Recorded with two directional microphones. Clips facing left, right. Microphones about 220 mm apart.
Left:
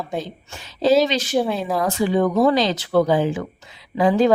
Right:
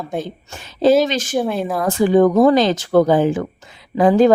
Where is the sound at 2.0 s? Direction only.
50° right (ahead or behind).